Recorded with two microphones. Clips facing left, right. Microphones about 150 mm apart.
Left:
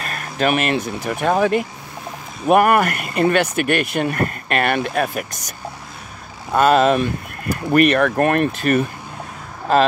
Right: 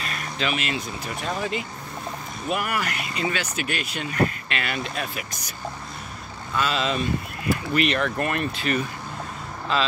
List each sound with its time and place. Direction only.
0.0 s a sound: 50° left (ahead or behind)
1.0 s speech: 60° left (ahead or behind)
6.5 s speech: 50° left (ahead or behind)